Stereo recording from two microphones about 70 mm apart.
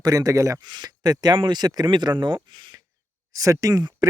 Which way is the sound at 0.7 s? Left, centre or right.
Right.